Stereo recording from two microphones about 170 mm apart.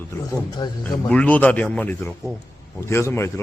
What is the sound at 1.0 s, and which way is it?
Speech, 10° left (ahead or behind).